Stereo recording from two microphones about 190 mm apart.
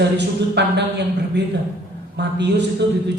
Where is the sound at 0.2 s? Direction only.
65° right (ahead or behind).